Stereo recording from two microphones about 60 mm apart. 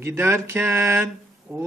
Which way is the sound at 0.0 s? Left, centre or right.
Right.